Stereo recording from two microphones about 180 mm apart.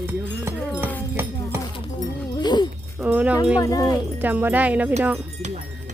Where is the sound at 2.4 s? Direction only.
25° left (ahead or behind).